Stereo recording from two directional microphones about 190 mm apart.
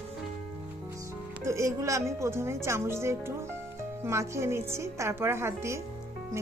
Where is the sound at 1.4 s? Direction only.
15° right (ahead or behind).